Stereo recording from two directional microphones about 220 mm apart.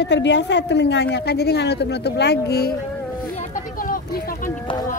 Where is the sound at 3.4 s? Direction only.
35° left (ahead or behind).